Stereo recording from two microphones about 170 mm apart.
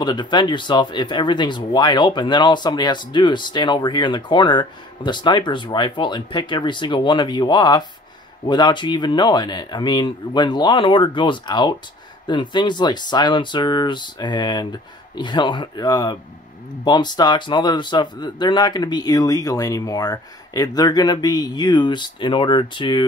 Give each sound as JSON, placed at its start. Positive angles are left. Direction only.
{"t": 0.0, "sound": "speech", "side_deg": 25}